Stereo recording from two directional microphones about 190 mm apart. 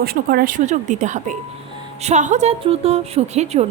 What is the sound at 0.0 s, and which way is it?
A woman's voice, 55° right (ahead or behind).